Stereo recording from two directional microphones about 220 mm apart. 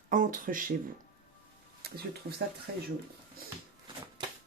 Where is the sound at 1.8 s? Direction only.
45° right (ahead or behind).